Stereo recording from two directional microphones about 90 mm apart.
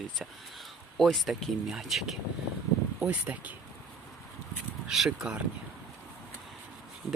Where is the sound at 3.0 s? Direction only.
15° right (ahead or behind).